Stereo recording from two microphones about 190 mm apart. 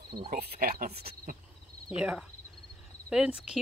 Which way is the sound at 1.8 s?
5° right (ahead or behind).